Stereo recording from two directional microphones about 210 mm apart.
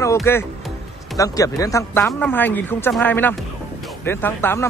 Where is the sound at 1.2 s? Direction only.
15° left (ahead or behind).